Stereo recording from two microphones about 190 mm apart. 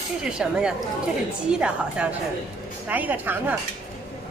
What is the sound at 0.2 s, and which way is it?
A woman's voice, 5° right (ahead or behind).